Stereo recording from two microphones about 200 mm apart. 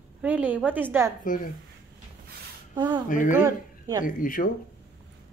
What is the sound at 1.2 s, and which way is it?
Speech, 40° left (ahead or behind).